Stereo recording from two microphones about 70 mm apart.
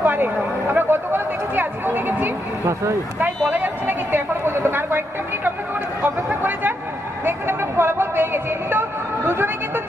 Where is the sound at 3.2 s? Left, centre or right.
Right.